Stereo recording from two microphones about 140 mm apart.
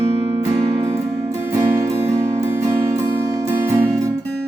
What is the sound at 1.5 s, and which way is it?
Music, 20° right (ahead or behind).